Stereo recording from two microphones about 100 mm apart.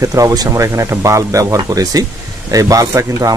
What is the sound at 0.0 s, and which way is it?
Speech, 35° right (ahead or behind).